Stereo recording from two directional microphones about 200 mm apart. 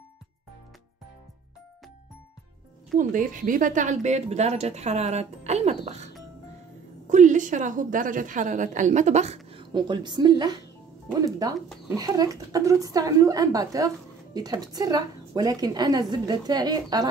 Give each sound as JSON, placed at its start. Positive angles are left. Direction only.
{"t": 3.0, "sound": "a woman's voice", "side_deg": -40}
{"t": 7.1, "sound": "a woman's voice", "side_deg": -40}